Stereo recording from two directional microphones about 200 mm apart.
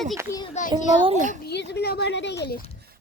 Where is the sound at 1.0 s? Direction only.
35° right (ahead or behind).